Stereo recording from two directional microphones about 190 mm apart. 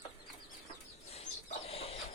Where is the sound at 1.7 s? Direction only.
30° left (ahead or behind).